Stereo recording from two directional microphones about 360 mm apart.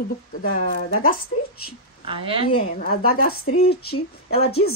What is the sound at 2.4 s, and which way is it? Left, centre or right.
A woman's voice, centre.